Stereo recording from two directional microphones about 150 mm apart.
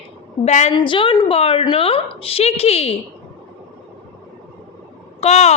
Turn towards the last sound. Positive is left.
turn(degrees=45)  # may be behind; listen again after turning